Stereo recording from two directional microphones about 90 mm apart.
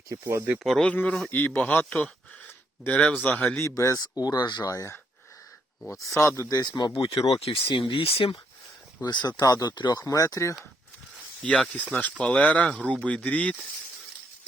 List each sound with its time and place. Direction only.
0.1 s speech: 30° right (ahead or behind)
0.6 s speech: centre (ahead or behind)
0.9 s speech: 15° left (ahead or behind)
3.6 s speech: 30° left (ahead or behind)
4.2 s speech: 45° left (ahead or behind)
4.7 s speech: 35° left (ahead or behind)
6.6 s speech: 55° left (ahead or behind)
6.9 s speech: 70° left (ahead or behind); by 8.4 s 85° left
9.0 s speech: 50° left (ahead or behind)
11.4 s speech: 5° left (ahead or behind)